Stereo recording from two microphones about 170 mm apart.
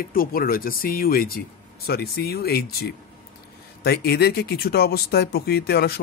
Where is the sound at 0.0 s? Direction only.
60° left (ahead or behind).